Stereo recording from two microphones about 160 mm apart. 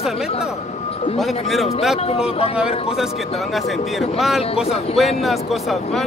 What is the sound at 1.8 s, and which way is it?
Speech, centre (ahead or behind).